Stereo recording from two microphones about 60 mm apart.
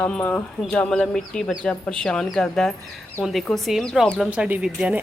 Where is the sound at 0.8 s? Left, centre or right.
Centre.